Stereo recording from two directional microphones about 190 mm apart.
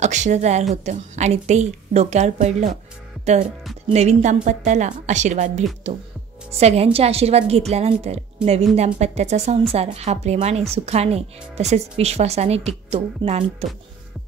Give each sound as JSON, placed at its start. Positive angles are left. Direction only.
{"t": 0.0, "sound": "speech", "side_deg": -40}
{"t": 3.9, "sound": "speech", "side_deg": -35}
{"t": 8.4, "sound": "a woman's voice", "side_deg": -5}
{"t": 8.7, "sound": "speech", "side_deg": -40}